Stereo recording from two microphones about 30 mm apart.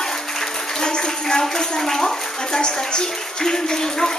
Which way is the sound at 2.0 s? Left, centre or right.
Left.